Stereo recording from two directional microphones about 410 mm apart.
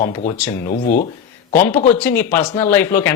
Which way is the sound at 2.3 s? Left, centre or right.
Centre.